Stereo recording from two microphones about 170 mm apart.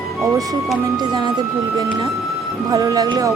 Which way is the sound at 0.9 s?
25° right (ahead or behind).